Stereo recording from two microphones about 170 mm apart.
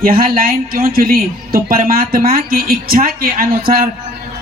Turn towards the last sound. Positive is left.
turn(degrees=-60)  # may be behind; listen again after turning